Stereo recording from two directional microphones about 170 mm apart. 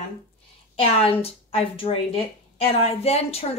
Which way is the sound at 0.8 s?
35° left (ahead or behind).